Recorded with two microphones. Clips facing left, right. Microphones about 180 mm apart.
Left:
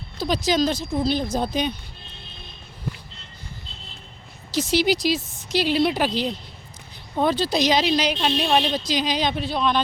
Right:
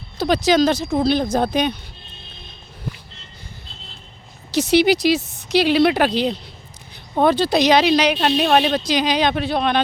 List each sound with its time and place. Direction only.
0.2 s speech: 70° right (ahead or behind)
4.5 s speech: 65° right (ahead or behind)